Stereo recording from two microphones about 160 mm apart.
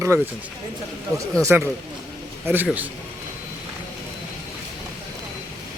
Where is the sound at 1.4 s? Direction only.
15° right (ahead or behind).